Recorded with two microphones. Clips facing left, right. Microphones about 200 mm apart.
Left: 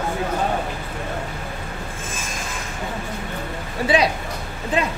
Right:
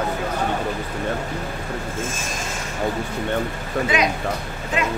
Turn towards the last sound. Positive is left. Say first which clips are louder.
# left 2 dB
turn(degrees=35)  # may be behind; listen again after turning